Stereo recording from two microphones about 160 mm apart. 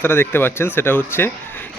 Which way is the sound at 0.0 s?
15° left (ahead or behind).